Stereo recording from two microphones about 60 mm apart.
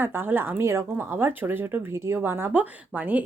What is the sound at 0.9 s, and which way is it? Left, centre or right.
Speech, right.